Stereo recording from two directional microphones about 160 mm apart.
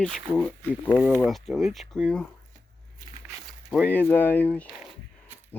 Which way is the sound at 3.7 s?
5° left (ahead or behind).